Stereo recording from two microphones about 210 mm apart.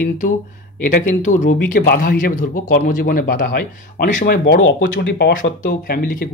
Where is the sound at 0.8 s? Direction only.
35° left (ahead or behind).